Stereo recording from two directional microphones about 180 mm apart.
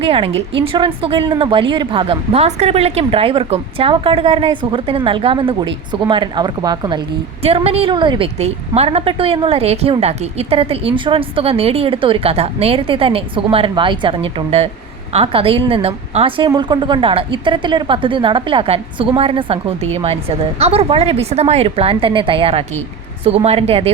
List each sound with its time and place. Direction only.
0.0 s a woman's voice: 30° right (ahead or behind)